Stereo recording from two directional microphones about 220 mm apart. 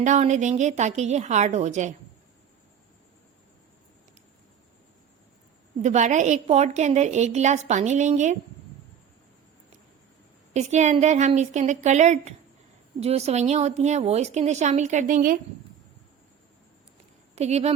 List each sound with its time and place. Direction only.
0.0 s a woman's voice: 35° right (ahead or behind)
5.8 s a woman's voice: 30° right (ahead or behind)
10.5 s a woman's voice: 30° right (ahead or behind)
17.3 s speech: 30° right (ahead or behind)